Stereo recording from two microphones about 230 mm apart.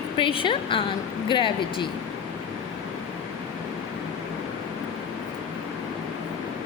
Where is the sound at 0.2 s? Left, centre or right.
Left.